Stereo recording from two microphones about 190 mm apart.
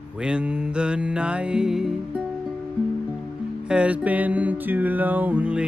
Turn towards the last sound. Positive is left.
turn(degrees=-5)  # may be behind; listen again after turning